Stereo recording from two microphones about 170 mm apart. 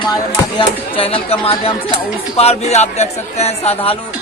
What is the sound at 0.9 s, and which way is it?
Speech, 35° left (ahead or behind).